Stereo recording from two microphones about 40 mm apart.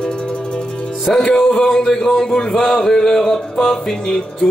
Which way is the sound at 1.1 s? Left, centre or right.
Centre.